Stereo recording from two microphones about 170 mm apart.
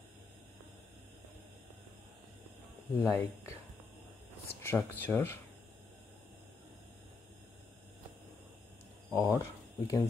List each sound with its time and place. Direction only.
2.9 s speech: 15° left (ahead or behind)
4.6 s speech: 10° left (ahead or behind)
9.1 s speech: 15° left (ahead or behind)